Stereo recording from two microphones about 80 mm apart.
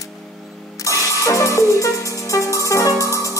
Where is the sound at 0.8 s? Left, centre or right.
Left.